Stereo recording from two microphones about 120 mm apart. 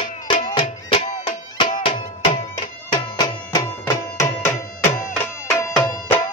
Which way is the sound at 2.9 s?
35° left (ahead or behind).